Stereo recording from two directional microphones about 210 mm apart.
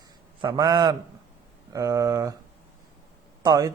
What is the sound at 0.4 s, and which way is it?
A man's voice, 20° right (ahead or behind).